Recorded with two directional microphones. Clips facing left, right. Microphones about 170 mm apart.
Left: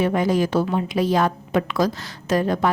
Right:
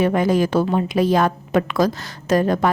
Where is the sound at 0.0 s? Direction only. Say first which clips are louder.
Right 2 dB; 50° right (ahead or behind).